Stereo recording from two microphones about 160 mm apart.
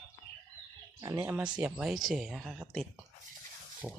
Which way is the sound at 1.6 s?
5° right (ahead or behind).